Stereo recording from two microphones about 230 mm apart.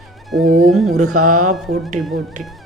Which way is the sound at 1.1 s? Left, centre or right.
Right.